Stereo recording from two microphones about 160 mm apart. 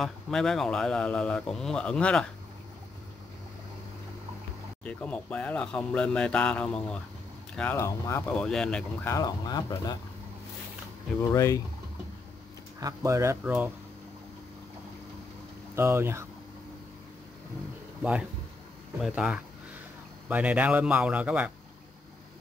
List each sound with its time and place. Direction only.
0.0 s a man's voice: centre (ahead or behind)
4.8 s speech: 5° left (ahead or behind)
9.1 s speech: 25° left (ahead or behind)
11.3 s speech: 20° left (ahead or behind)
12.8 s a man's voice: 20° right (ahead or behind)
15.7 s a man's voice: 15° right (ahead or behind)
19.0 s a man's voice: 5° right (ahead or behind)